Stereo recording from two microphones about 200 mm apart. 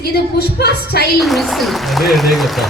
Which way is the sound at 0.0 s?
50° left (ahead or behind).